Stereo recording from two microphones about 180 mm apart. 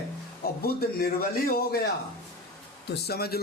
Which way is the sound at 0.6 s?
55° left (ahead or behind).